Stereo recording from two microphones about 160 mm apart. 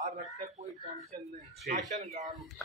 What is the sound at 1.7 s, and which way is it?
Speech, 55° right (ahead or behind).